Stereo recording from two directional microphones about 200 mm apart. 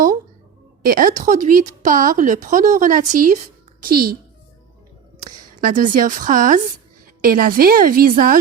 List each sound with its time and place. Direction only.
0.9 s speech: 45° right (ahead or behind)
5.2 s a woman's voice: 45° right (ahead or behind)